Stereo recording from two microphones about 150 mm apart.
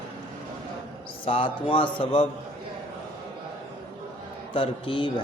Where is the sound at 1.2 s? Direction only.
35° left (ahead or behind).